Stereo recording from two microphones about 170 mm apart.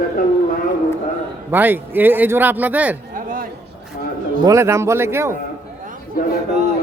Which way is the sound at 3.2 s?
55° right (ahead or behind).